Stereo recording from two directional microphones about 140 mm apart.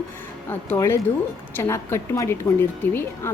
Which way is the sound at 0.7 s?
15° left (ahead or behind).